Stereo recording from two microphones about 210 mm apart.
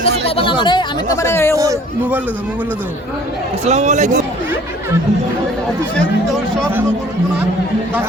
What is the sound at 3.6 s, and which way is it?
Speech, 35° right (ahead or behind).